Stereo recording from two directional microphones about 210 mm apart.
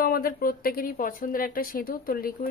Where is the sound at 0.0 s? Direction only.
45° left (ahead or behind).